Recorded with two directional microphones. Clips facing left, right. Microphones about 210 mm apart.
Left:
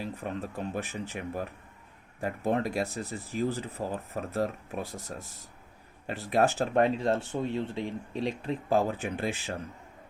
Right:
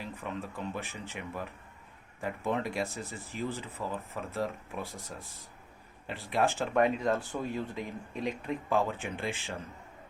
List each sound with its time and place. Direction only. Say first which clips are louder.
0.0 s speech: left 4 dB; 40° left (ahead or behind)